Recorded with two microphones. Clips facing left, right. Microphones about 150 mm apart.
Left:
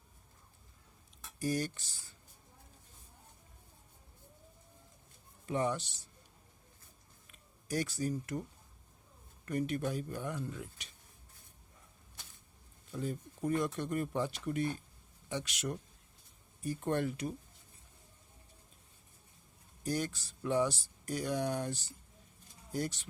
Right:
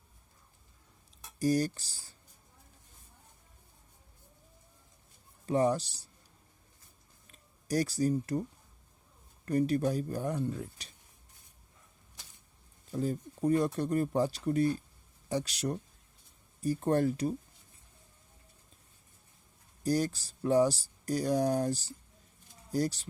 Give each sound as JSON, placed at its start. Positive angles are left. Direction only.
{"t": 1.4, "sound": "speech", "side_deg": -35}
{"t": 5.5, "sound": "speech", "side_deg": -35}
{"t": 7.3, "sound": "speech", "side_deg": -35}
{"t": 9.5, "sound": "speech", "side_deg": -35}
{"t": 12.9, "sound": "speech", "side_deg": -35}
{"t": 19.8, "sound": "speech", "side_deg": -35}